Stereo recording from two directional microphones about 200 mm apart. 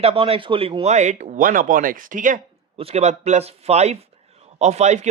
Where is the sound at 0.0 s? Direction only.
30° right (ahead or behind).